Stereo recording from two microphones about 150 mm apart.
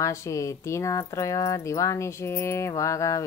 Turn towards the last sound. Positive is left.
turn(degrees=20)  # may be behind; listen again after turning